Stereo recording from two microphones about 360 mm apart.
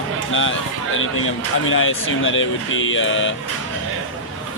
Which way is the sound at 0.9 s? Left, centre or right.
Left.